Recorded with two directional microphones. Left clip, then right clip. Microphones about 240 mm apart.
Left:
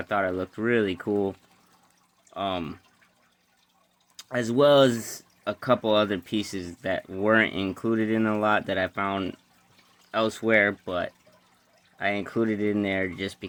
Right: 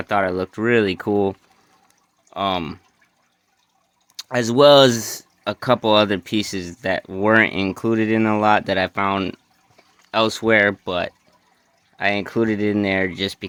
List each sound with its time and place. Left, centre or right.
0.0 s speech: right
4.2 s speech: right